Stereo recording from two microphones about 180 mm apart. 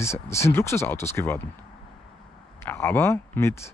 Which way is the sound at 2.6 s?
10° left (ahead or behind).